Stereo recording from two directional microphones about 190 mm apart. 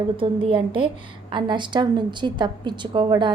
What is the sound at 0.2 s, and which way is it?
A woman's voice, 25° right (ahead or behind).